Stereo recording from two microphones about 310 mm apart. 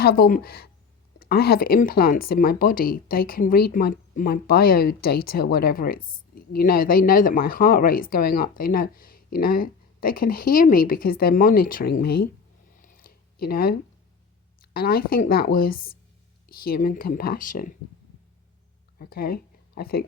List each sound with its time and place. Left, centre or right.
0.0 s speech: left
12.7 s a sound: left
14.6 s speech: left
18.9 s speech: left